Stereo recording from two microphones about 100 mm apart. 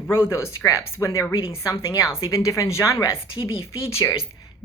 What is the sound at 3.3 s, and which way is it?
Speech, 65° left (ahead or behind).